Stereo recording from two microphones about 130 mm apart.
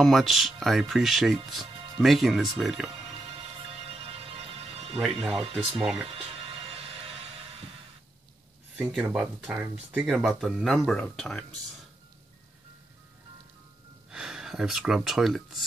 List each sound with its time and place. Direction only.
0.0 s speech: centre (ahead or behind)
3.3 s music: 50° right (ahead or behind)
4.9 s speech: centre (ahead or behind)
6.0 s music: 50° right (ahead or behind)
8.8 s speech: 5° right (ahead or behind)
14.1 s speech: 5° right (ahead or behind)